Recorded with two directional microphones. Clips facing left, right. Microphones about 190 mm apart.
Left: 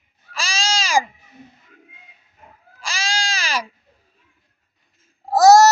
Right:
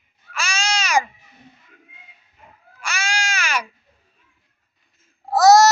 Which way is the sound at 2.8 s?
30° left (ahead or behind).